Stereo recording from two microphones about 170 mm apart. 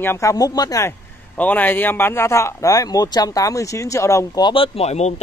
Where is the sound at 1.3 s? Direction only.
10° left (ahead or behind).